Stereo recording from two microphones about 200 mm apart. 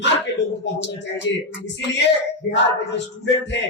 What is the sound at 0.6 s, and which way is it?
Speech, 60° left (ahead or behind).